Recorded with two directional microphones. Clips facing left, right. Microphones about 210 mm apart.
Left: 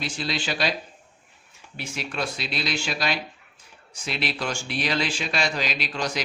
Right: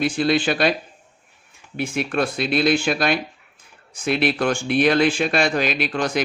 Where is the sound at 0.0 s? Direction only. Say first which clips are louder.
Right 11 dB; 55° right (ahead or behind).